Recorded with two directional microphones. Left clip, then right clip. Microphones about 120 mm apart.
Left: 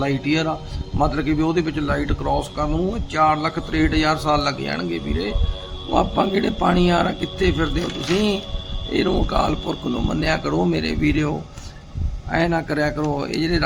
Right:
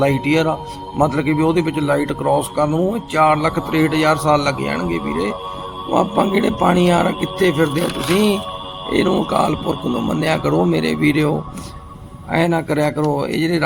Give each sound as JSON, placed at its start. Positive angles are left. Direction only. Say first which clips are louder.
{"t": 0.0, "sound": "speech", "louder": "right 5 dB", "side_deg": -55}
{"t": 8.9, "sound": "speech", "louder": "right 4 dB", "side_deg": -40}